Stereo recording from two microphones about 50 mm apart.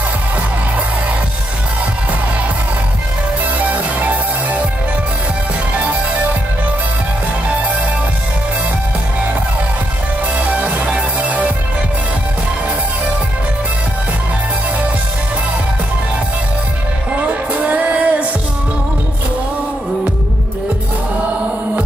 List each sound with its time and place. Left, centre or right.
3.5 s music: right
10.5 s music: right
17.3 s music: right